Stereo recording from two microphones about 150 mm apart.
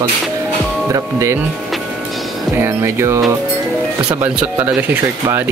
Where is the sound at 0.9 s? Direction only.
20° right (ahead or behind).